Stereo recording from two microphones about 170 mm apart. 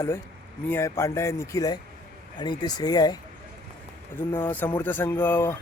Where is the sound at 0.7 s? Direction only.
15° left (ahead or behind).